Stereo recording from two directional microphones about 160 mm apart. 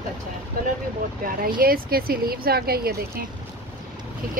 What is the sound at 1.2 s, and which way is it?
Speech, 65° right (ahead or behind).